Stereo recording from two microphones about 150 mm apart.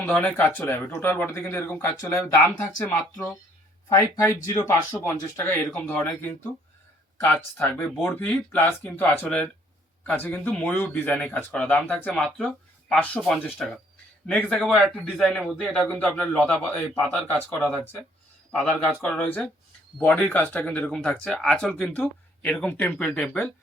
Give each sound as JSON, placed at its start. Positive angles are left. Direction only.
{"t": 0.0, "sound": "a man's voice", "side_deg": 10}